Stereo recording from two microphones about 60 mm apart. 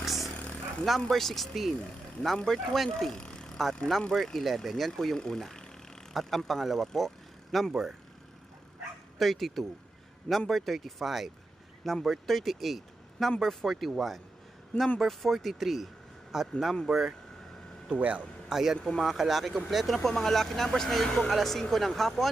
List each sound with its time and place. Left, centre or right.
0.0 s a sound: centre
0.4 s a sound: left
0.9 s speech: centre
9.1 s a man's voice: centre
17.8 s a man's voice: right
18.4 s speech: centre
18.8 s speech: centre
19.0 s speech: centre